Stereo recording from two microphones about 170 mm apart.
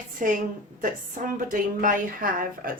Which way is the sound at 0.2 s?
50° right (ahead or behind).